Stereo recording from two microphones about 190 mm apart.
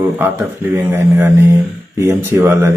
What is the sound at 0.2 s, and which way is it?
A man's voice, 15° right (ahead or behind).